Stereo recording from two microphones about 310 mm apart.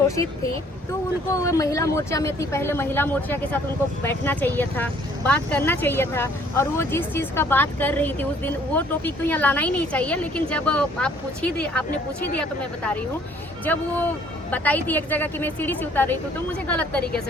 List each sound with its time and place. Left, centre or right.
1.3 s a woman's voice: centre